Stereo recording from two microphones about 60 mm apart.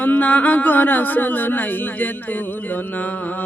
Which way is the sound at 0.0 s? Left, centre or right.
Left.